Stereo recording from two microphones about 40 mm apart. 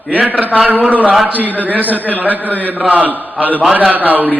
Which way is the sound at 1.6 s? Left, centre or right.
Right.